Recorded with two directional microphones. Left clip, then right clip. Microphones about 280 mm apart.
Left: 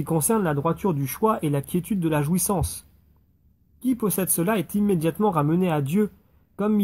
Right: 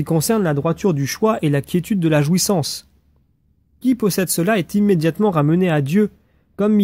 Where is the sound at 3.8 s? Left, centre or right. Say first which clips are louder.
Right 7 dB; right.